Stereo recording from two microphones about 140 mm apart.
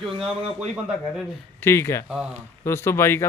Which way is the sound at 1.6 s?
20° left (ahead or behind).